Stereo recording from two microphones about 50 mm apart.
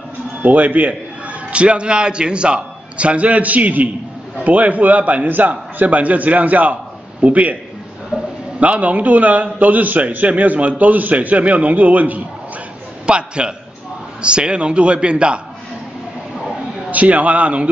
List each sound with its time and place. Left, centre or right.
0.4 s a man's voice: right
8.1 s a sound: right
8.5 s a man's voice: right
13.0 s a man's voice: centre
16.9 s a man's voice: right